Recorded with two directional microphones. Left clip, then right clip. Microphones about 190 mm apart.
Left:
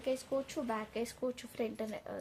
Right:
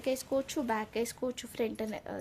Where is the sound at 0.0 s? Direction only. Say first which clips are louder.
Right 4 dB; 45° right (ahead or behind).